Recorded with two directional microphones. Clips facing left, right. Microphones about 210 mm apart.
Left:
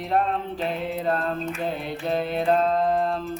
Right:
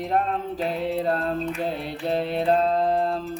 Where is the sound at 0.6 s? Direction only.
35° right (ahead or behind).